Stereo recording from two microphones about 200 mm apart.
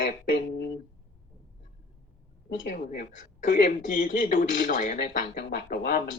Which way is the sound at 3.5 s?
40° left (ahead or behind).